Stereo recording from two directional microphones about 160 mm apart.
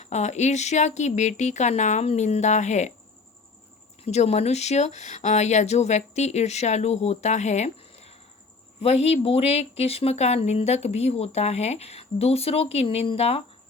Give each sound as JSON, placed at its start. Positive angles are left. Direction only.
{"t": 0.0, "sound": "speech", "side_deg": 45}
{"t": 4.0, "sound": "speech", "side_deg": 40}